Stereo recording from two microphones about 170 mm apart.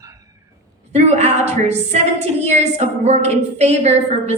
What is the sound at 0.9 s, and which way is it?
A woman's voice, 40° right (ahead or behind).